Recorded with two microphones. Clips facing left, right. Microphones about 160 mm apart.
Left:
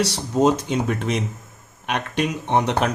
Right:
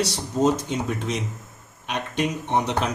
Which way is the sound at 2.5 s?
60° left (ahead or behind).